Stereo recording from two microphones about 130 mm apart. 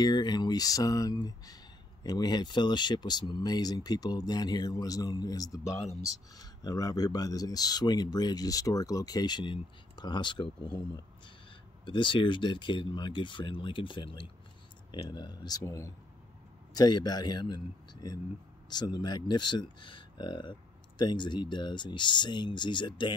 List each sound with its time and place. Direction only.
0.0 s speech: 35° left (ahead or behind)
11.8 s speech: 40° left (ahead or behind)
15.6 s speech: 20° left (ahead or behind)
18.7 s speech: 35° left (ahead or behind)